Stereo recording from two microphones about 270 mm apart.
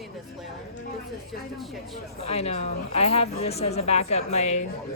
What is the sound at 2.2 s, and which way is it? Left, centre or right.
Speech, left.